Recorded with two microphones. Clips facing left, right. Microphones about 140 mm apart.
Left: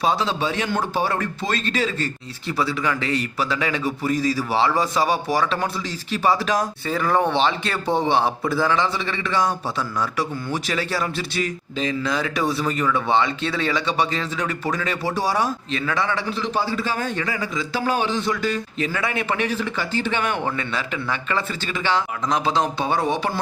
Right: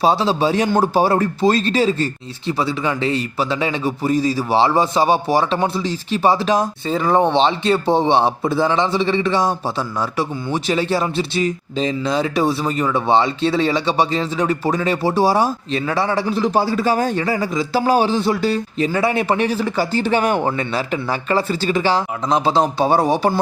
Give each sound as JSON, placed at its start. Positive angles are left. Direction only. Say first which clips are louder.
{"t": 0.0, "sound": "a man's voice", "louder": "right 6 dB", "side_deg": -35}